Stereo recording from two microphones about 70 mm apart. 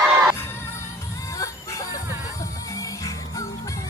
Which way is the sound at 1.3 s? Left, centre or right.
Left.